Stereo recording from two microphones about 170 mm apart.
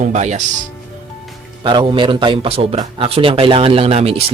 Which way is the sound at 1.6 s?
25° right (ahead or behind).